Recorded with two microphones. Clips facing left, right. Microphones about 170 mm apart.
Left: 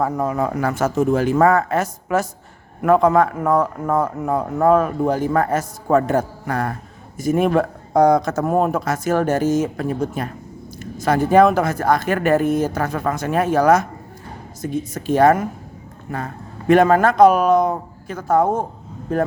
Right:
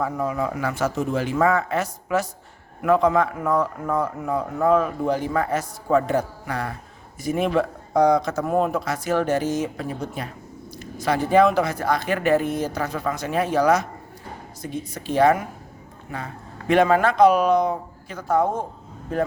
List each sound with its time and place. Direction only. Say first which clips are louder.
0.0 s a man's voice: left 4 dB; 45° left (ahead or behind)